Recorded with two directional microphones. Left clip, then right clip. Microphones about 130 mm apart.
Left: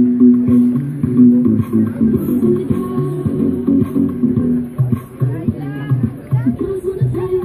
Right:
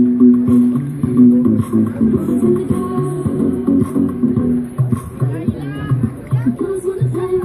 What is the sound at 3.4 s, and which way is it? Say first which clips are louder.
Music: even; centre (ahead or behind).